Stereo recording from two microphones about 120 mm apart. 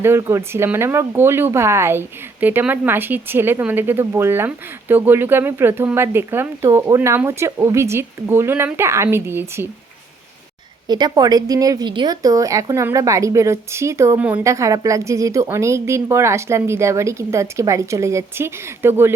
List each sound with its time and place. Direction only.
0.0 s speech: 20° right (ahead or behind)
10.8 s speech: 35° right (ahead or behind)
14.2 s a woman's voice: 10° right (ahead or behind)
14.4 s speech: 25° right (ahead or behind)